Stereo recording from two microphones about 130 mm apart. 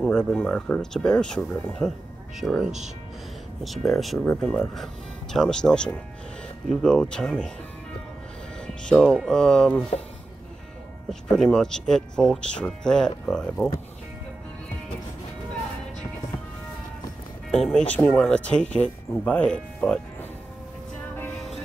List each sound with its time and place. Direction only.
0.0 s speech: 5° left (ahead or behind)
2.4 s speech: centre (ahead or behind)
8.8 s speech: 5° left (ahead or behind)
11.1 s speech: 5° left (ahead or behind)
17.5 s speech: centre (ahead or behind)